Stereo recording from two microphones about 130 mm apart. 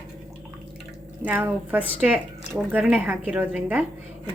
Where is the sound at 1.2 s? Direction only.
15° right (ahead or behind).